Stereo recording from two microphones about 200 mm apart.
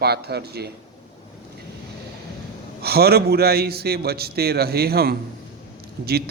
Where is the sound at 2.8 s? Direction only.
50° right (ahead or behind).